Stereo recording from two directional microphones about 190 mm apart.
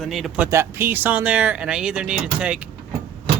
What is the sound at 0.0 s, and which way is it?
Speech, centre (ahead or behind).